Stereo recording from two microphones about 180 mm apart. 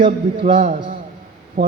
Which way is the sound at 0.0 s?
25° right (ahead or behind).